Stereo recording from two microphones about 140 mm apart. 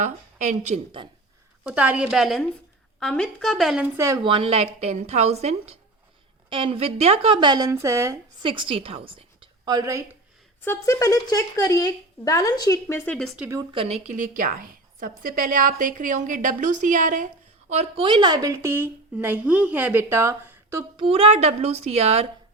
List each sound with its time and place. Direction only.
0.0 s speech: 60° right (ahead or behind)
1.6 s a woman's voice: 10° right (ahead or behind)
3.9 s speech: 20° right (ahead or behind)
4.2 s speech: 40° right (ahead or behind); by 8.4 s 20° right (ahead or behind)
8.4 s a woman's voice: 40° right (ahead or behind)
10.6 s speech: 15° left (ahead or behind)
13.0 s speech: 5° left (ahead or behind)
13.7 s speech: 50° right (ahead or behind)
14.2 s a woman's voice: 80° right
17.7 s speech: 45° right (ahead or behind)
18.5 s a woman's voice: 15° right (ahead or behind)
20.9 s speech: 40° right (ahead or behind)